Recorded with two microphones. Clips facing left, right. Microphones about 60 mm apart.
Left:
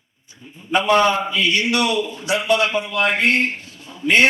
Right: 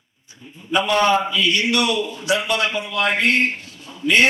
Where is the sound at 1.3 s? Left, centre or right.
Left.